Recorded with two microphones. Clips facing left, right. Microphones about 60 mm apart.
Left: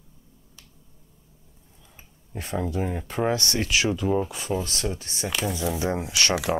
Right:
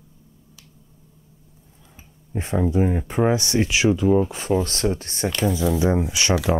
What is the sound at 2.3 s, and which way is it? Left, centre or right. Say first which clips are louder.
Speech: right 7 dB; right.